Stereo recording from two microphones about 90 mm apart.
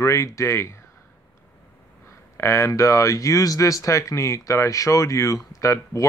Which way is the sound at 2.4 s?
30° left (ahead or behind).